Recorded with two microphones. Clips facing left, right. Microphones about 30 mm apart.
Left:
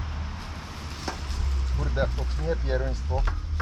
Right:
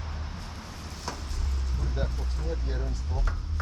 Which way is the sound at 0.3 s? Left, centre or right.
Left.